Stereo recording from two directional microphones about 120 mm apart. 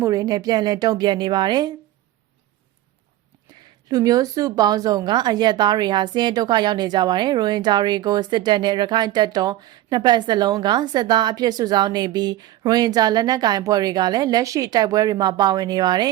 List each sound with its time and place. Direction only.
0.0 s a woman's voice: 30° right (ahead or behind)
3.8 s a woman's voice: 30° right (ahead or behind)